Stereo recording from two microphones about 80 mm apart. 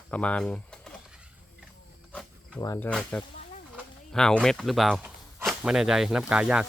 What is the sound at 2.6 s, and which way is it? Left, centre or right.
Speech, left.